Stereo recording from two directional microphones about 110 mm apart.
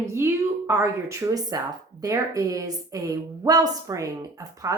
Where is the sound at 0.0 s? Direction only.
25° right (ahead or behind).